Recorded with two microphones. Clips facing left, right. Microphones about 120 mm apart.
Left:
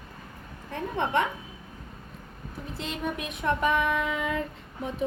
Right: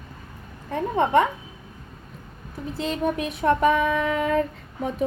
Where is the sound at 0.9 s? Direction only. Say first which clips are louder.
Right 7 dB; 40° right (ahead or behind).